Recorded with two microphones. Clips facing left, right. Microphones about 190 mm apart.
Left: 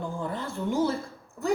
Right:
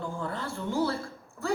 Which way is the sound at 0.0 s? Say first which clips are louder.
Left 2 dB; 15° left (ahead or behind).